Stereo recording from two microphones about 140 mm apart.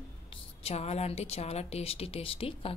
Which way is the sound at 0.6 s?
45° left (ahead or behind).